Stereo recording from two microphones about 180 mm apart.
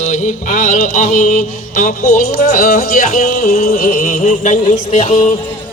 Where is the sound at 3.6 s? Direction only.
50° left (ahead or behind).